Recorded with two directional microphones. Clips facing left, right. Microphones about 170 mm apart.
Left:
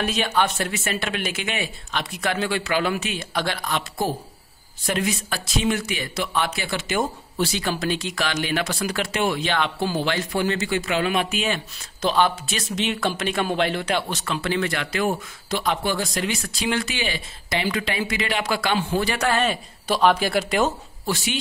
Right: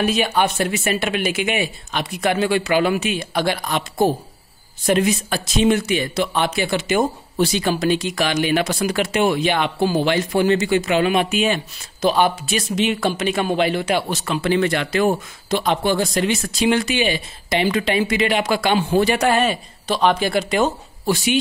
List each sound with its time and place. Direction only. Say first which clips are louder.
0.0 s speech: right 4 dB; 10° right (ahead or behind)
19.9 s speech: right 1 dB; 5° left (ahead or behind)